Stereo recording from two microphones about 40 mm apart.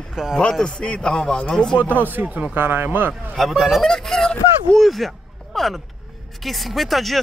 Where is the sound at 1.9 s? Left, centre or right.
Right.